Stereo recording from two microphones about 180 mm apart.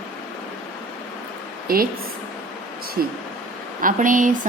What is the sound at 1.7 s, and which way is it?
Speech, 55° right (ahead or behind).